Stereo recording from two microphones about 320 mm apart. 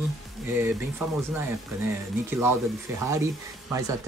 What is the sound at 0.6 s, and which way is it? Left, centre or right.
Speech, centre.